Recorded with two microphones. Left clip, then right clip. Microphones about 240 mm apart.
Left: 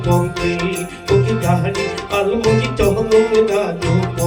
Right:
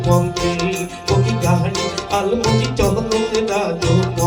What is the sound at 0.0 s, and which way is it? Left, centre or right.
Music, right.